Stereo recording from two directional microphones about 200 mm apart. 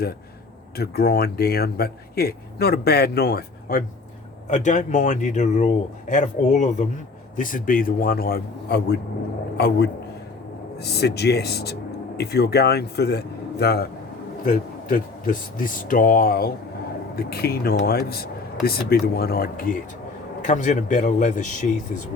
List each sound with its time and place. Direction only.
0.8 s speech: 50° left (ahead or behind)
4.4 s a man's voice: 35° left (ahead or behind); by 13.8 s 55° left (ahead or behind)
14.4 s speech: 40° left (ahead or behind)